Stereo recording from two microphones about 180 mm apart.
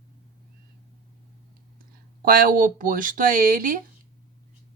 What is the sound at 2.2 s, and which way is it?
Speech, 50° right (ahead or behind).